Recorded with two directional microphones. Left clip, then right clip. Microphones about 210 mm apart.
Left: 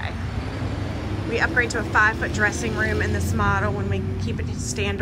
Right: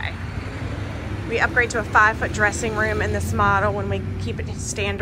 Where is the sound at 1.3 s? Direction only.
5° left (ahead or behind).